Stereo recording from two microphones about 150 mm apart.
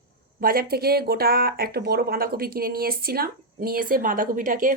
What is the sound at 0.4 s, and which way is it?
Speech, 85° right.